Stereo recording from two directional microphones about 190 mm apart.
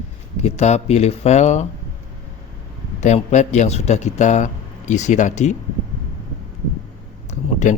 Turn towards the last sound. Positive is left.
turn(degrees=40)  # may be behind; listen again after turning